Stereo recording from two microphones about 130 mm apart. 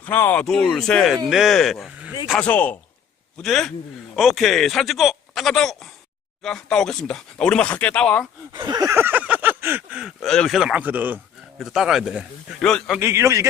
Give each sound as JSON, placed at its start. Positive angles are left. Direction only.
{"t": 0.0, "sound": "speech", "side_deg": 15}
{"t": 0.4, "sound": "speech", "side_deg": 5}
{"t": 2.4, "sound": "speech", "side_deg": 10}
{"t": 8.5, "sound": "speech", "side_deg": -30}
{"t": 11.5, "sound": "speech", "side_deg": 0}
{"t": 13.0, "sound": "a man's voice", "side_deg": -20}